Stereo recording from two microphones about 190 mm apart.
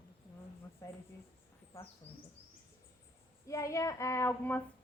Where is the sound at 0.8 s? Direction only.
15° left (ahead or behind).